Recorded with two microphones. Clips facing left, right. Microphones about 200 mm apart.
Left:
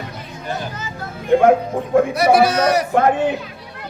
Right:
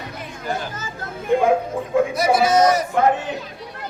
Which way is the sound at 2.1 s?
65° left (ahead or behind).